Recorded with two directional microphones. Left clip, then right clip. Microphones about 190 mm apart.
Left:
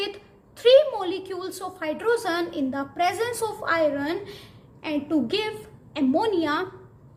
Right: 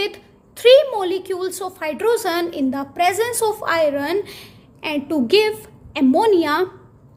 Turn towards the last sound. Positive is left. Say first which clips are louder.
# right 8 dB
turn(degrees=-40)  # may be behind; listen again after turning